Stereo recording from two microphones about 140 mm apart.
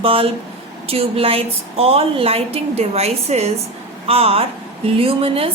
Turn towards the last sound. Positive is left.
turn(degrees=-45)  # may be behind; listen again after turning